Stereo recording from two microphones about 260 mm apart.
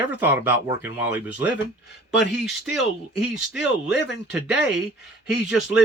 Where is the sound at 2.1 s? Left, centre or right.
Left.